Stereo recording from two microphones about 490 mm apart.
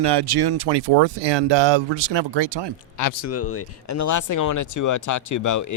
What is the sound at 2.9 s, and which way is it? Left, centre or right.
Speech, left.